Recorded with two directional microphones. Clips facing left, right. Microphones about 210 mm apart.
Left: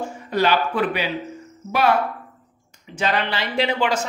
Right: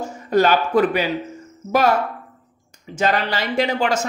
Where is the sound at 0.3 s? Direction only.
45° right (ahead or behind).